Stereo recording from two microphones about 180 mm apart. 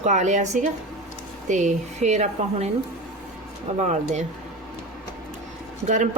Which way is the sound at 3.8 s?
40° right (ahead or behind).